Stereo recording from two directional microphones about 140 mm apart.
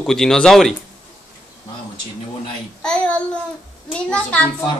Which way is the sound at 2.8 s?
5° left (ahead or behind).